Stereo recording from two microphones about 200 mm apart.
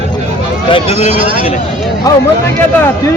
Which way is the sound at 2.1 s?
15° left (ahead or behind).